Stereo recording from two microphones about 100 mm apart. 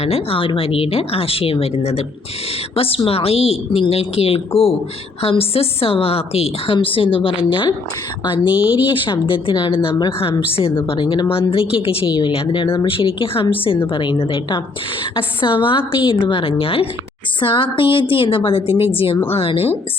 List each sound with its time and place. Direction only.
0.0 s speech: 90° left
2.7 s speech: 70° left (ahead or behind)
6.7 s a woman's voice: 65° left (ahead or behind)
8.4 s a woman's voice: 15° right (ahead or behind)
8.9 s a woman's voice: 60° left (ahead or behind); by 19.8 s 75° left (ahead or behind)